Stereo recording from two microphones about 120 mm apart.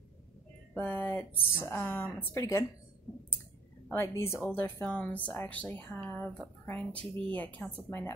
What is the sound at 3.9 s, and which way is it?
A woman's voice, 20° left (ahead or behind).